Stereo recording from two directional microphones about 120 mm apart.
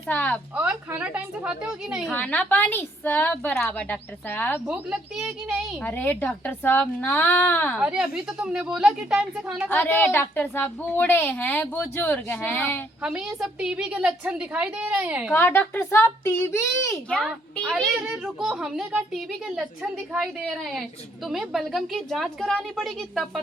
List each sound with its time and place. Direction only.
0.1 s a woman's voice: 10° left (ahead or behind)
0.7 s a woman's voice: 10° right (ahead or behind)
2.0 s a woman's voice: 10° left (ahead or behind)
4.7 s a woman's voice: 5° right (ahead or behind)
5.8 s a woman's voice: 15° left (ahead or behind)
7.8 s a woman's voice: 5° right (ahead or behind)
9.6 s a woman's voice: 15° left (ahead or behind)
13.0 s a woman's voice: 5° right (ahead or behind)
15.3 s a child's voice: 15° left (ahead or behind)
17.1 s a woman's voice: 10° left (ahead or behind)
21.2 s a woman's voice: centre (ahead or behind)